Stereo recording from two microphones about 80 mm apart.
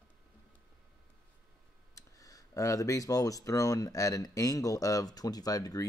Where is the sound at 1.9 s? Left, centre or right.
Left.